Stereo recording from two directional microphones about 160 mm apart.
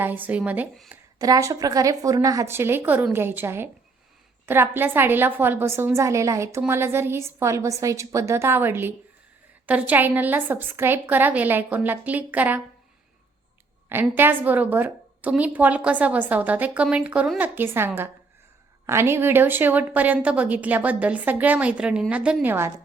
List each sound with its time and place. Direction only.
0.0 s a woman's voice: 10° right (ahead or behind)
1.2 s a woman's voice: 20° right (ahead or behind)
13.9 s a woman's voice: 10° right (ahead or behind)